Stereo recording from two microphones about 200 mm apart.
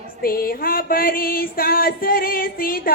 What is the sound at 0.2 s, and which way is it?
Music, 45° left (ahead or behind).